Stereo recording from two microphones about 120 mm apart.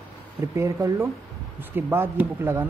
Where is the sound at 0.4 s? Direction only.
25° right (ahead or behind).